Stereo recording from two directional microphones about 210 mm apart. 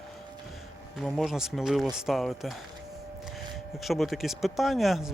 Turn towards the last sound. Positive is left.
turn(degrees=0)  # may be behind; listen again after turning